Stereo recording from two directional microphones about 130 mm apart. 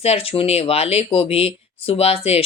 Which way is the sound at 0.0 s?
50° left (ahead or behind).